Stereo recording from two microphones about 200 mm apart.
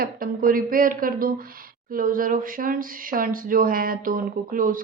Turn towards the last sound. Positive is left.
turn(degrees=-45)  # may be behind; listen again after turning